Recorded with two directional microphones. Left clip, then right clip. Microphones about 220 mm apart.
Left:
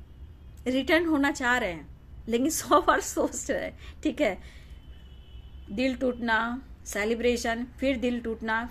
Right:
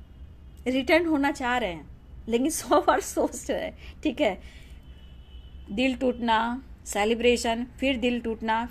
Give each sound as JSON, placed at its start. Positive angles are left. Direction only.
{"t": 0.7, "sound": "a woman's voice", "side_deg": -10}
{"t": 5.8, "sound": "a woman's voice", "side_deg": -15}